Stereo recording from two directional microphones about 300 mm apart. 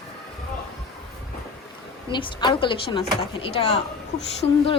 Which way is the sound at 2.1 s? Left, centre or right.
Centre.